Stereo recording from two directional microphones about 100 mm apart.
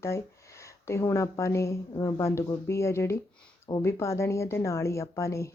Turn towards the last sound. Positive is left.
turn(degrees=30)  # may be behind; listen again after turning